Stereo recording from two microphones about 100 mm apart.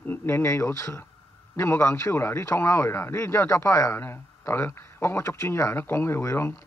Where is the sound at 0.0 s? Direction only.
20° left (ahead or behind).